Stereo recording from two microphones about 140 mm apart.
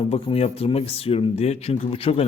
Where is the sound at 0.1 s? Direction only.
45° left (ahead or behind).